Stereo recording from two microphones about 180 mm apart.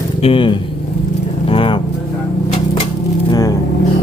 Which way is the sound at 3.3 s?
20° left (ahead or behind).